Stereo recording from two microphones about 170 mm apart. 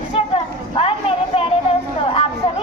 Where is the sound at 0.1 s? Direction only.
35° left (ahead or behind).